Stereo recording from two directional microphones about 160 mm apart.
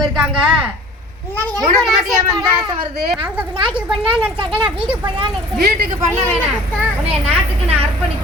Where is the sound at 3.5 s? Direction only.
30° right (ahead or behind).